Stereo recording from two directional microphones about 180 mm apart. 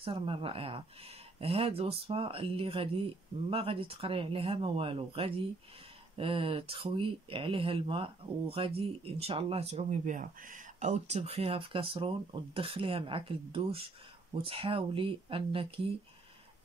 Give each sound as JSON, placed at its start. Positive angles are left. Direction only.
{"t": 0.0, "sound": "speech", "side_deg": -30}